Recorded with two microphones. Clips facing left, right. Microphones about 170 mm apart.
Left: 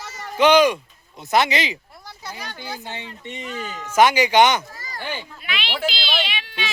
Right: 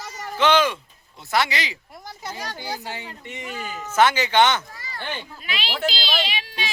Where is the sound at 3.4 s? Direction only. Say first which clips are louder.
Even; 10° right (ahead or behind).